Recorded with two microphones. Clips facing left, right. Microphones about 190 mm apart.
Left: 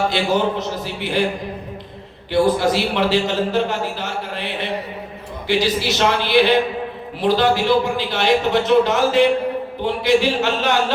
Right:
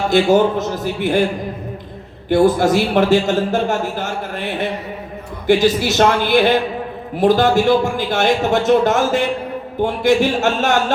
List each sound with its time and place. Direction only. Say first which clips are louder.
0.1 s speech: right 6 dB; 45° right (ahead or behind)
2.3 s speech: right 3 dB; 50° right (ahead or behind)